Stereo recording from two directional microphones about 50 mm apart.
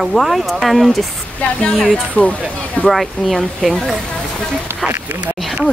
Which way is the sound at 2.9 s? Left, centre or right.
Centre.